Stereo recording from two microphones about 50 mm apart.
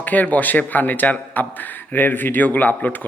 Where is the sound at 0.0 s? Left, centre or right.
Left.